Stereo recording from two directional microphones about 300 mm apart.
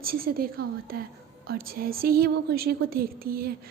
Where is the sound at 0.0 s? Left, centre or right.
Right.